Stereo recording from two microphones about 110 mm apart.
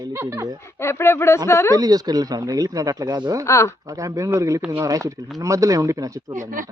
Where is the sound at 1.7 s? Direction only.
35° right (ahead or behind).